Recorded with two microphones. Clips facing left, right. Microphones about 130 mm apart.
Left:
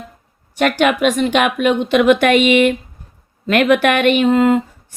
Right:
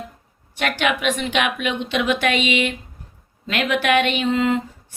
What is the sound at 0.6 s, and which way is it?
A woman's voice, 45° left (ahead or behind).